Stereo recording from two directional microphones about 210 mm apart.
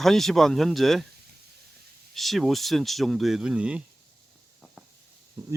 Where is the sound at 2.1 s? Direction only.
Centre (ahead or behind).